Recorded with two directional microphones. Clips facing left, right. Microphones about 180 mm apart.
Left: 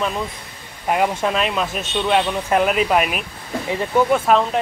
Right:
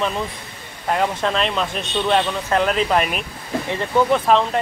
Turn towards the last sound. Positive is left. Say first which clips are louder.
# even
turn(degrees=5)  # may be behind; listen again after turning